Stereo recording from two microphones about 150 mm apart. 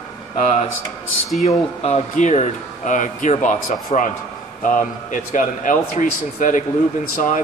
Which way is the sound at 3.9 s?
45° left (ahead or behind).